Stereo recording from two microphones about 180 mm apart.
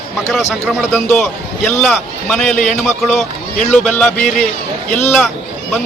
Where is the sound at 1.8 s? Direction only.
5° left (ahead or behind).